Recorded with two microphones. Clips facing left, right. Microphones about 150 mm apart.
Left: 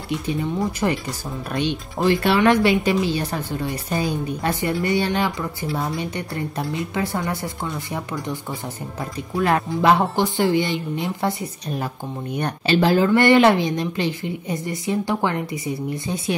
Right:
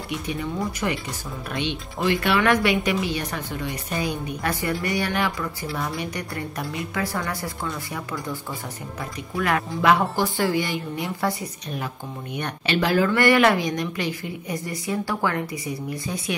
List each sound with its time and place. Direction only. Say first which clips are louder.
0.3 s speech: left 4 dB; 30° left (ahead or behind)
1.5 s speech: left 4 dB; 40° left (ahead or behind); by 8.4 s 20° left (ahead or behind)
9.4 s speech: left 4 dB; 30° left (ahead or behind)
12.4 s speech: left 5 dB; 35° left (ahead or behind)